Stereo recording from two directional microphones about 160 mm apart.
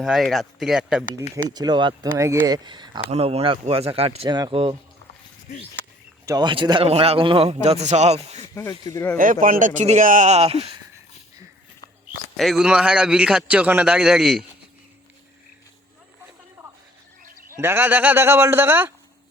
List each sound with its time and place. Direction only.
0.0 s a man's voice: centre (ahead or behind)
1.5 s speech: 25° right (ahead or behind)
2.0 s speech: 20° right (ahead or behind)
3.1 s a man's voice: 40° right (ahead or behind)
6.2 s a man's voice: 25° right (ahead or behind); by 8.4 s 45° right (ahead or behind)
8.7 s speech: 25° left (ahead or behind)
9.1 s speech: 60° right (ahead or behind); by 10.8 s 35° right (ahead or behind)
12.4 s a man's voice: centre (ahead or behind)
17.6 s a man's voice: 15° right (ahead or behind)